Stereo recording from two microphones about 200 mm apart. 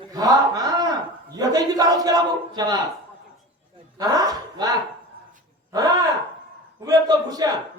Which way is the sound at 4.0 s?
20° right (ahead or behind).